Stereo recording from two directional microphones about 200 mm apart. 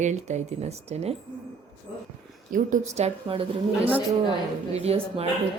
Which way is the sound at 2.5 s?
40° right (ahead or behind).